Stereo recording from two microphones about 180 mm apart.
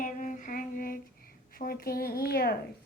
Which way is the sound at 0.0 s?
45° left (ahead or behind).